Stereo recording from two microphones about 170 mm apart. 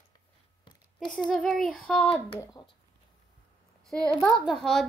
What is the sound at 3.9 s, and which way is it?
Child singing, 5° left (ahead or behind).